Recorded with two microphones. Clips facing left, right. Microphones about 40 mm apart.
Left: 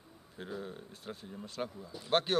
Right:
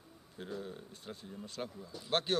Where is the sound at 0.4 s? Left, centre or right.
Centre.